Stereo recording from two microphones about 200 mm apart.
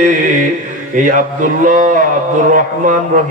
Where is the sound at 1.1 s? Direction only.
40° right (ahead or behind).